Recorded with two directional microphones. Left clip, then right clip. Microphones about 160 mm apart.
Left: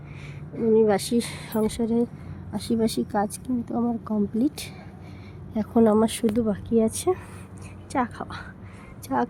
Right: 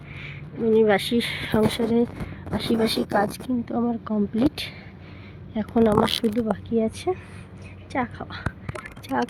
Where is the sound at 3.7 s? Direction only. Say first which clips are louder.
Right 1 dB; 5° right (ahead or behind).